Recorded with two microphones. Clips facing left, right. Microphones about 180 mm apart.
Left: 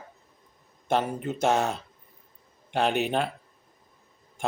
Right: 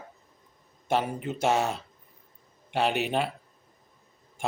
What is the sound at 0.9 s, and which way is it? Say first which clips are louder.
Speech: left 1 dB; 10° right (ahead or behind).